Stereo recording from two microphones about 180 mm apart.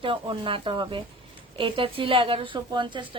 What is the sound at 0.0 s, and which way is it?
A woman's voice, 30° right (ahead or behind).